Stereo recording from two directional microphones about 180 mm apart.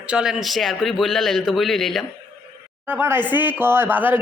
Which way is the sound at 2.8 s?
10° right (ahead or behind).